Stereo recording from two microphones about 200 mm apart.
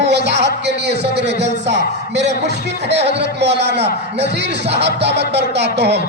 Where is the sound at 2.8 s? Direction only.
60° right (ahead or behind).